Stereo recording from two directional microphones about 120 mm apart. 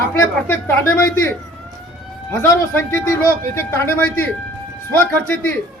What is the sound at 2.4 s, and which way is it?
Speech, 20° left (ahead or behind).